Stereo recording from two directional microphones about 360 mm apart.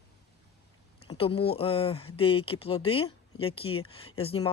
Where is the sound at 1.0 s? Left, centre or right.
Centre.